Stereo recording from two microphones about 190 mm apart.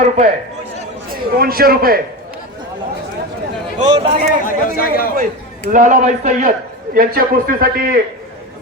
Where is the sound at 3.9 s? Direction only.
25° right (ahead or behind).